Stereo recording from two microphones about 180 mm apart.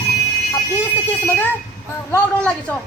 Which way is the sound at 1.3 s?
10° left (ahead or behind).